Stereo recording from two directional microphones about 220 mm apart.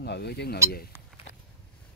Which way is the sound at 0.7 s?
45° left (ahead or behind).